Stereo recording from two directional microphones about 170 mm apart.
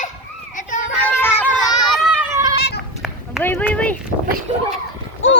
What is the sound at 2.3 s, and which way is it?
Goat, 20° right (ahead or behind).